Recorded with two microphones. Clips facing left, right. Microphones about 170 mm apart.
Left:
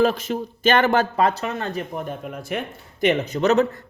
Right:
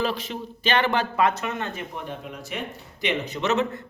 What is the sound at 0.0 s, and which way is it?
Speech, 45° left (ahead or behind).